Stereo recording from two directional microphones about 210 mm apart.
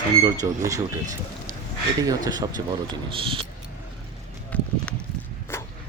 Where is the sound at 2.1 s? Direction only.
20° right (ahead or behind).